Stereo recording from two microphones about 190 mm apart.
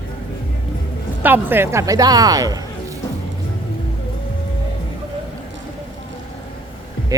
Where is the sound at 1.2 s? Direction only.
10° right (ahead or behind).